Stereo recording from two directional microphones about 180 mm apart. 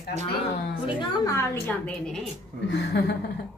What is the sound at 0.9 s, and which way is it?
Speech, 20° left (ahead or behind).